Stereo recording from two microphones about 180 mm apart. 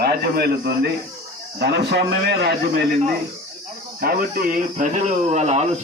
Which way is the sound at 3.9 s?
55° right (ahead or behind).